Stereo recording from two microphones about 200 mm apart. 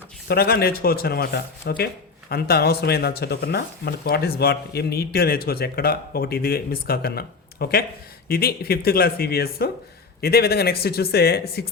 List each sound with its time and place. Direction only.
0.3 s speech: 50° left (ahead or behind)